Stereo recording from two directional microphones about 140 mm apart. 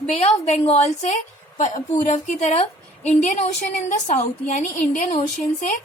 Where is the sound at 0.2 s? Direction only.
50° left (ahead or behind).